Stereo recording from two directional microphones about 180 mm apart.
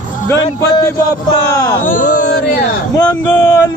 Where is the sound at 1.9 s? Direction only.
45° left (ahead or behind).